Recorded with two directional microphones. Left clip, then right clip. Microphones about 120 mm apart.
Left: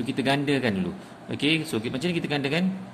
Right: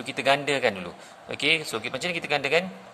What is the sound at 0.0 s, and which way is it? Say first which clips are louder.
Speech: right 2 dB; 45° right (ahead or behind).